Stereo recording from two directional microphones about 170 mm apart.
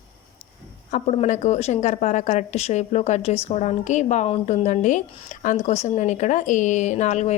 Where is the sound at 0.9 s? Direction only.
45° left (ahead or behind).